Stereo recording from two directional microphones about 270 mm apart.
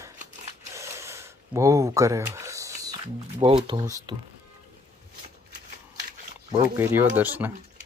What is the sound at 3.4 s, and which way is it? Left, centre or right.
Speech, centre.